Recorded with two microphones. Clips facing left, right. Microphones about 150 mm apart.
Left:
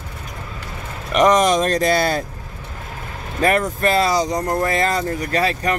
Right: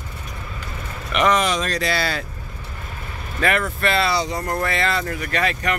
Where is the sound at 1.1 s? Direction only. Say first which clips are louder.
Left 5 dB; 45° left (ahead or behind).